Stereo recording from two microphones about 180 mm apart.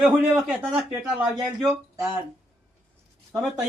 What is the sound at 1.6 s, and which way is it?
Speech, 15° right (ahead or behind).